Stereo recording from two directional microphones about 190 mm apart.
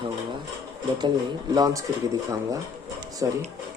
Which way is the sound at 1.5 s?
20° right (ahead or behind).